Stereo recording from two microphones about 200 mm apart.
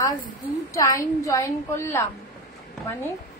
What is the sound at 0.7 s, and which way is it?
A woman's voice, 15° left (ahead or behind).